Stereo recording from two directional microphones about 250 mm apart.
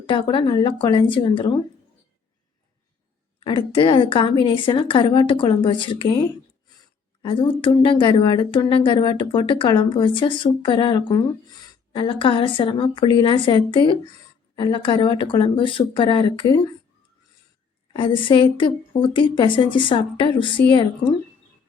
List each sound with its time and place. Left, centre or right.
0.0 s speech: centre
3.4 s a woman's voice: left
17.9 s speech: left